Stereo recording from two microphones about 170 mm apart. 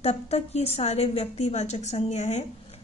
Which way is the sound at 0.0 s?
40° left (ahead or behind).